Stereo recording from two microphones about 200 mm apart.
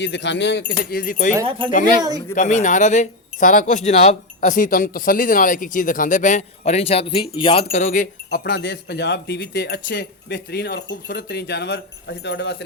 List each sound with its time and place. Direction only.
0.0 s speech: 60° left (ahead or behind); by 1.3 s 45° left (ahead or behind)
1.5 s speech: 25° right (ahead or behind)
2.3 s speech: 40° left (ahead or behind)
8.4 s speech: 60° left (ahead or behind)